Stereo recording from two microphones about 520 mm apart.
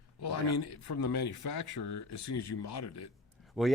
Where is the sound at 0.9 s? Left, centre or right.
Left.